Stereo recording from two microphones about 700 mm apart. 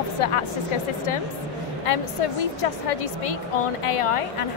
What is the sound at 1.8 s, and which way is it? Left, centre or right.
A woman's voice, left.